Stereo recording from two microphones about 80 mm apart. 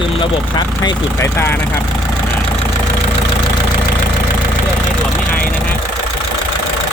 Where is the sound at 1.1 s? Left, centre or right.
Left.